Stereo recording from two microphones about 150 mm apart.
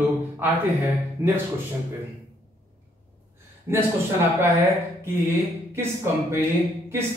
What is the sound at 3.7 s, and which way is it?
Speech, 20° right (ahead or behind).